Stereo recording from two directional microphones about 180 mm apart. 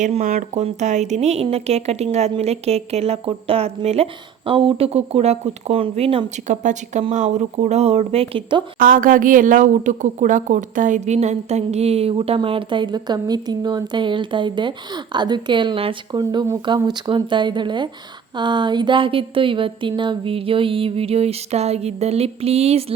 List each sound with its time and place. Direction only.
0.0 s a woman's voice: 45° right (ahead or behind)
8.8 s a woman's voice: 50° right (ahead or behind); by 22.9 s 35° right (ahead or behind)